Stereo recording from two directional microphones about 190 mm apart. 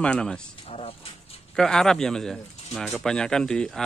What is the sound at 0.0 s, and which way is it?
Speech, 5° left (ahead or behind).